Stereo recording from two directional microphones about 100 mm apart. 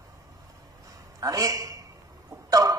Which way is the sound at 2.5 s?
35° right (ahead or behind).